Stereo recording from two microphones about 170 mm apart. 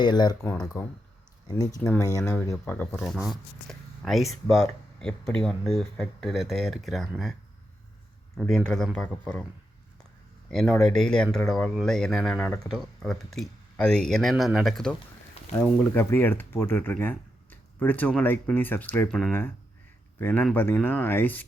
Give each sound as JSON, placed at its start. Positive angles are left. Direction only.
{"t": 0.0, "sound": "speech", "side_deg": 25}
{"t": 0.4, "sound": "speech", "side_deg": 5}
{"t": 1.5, "sound": "speech", "side_deg": 20}
{"t": 3.0, "sound": "speech", "side_deg": 0}
{"t": 8.4, "sound": "speech", "side_deg": 0}
{"t": 10.5, "sound": "speech", "side_deg": 0}
{"t": 16.0, "sound": "speech", "side_deg": 15}